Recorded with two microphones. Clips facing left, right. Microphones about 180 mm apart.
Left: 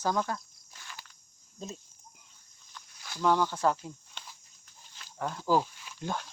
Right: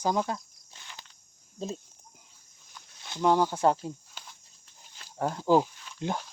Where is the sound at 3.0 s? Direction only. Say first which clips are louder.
Right 3 dB; 20° right (ahead or behind).